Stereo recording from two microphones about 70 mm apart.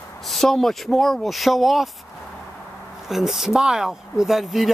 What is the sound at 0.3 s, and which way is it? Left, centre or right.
Speech, centre.